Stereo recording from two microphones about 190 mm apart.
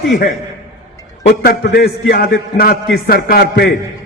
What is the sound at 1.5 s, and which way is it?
A man's voice, 55° left (ahead or behind).